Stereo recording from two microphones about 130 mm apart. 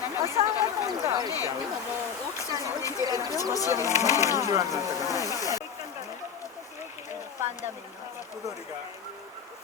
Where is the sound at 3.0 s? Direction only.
30° right (ahead or behind).